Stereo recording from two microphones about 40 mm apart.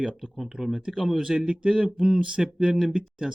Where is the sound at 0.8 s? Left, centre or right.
Right.